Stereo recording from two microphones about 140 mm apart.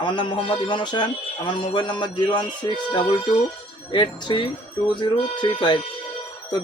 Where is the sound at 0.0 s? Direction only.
35° left (ahead or behind).